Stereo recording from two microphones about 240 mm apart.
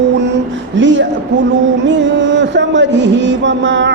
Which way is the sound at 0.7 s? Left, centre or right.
Right.